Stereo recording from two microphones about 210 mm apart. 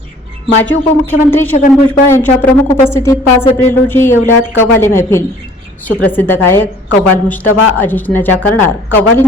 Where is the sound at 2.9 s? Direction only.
15° left (ahead or behind).